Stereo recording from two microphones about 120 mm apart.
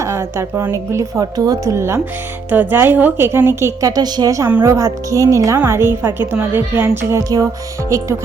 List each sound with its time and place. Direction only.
0.0 s speech: 25° right (ahead or behind)
4.4 s a woman's voice: 15° right (ahead or behind)
4.7 s a woman's voice: 25° right (ahead or behind)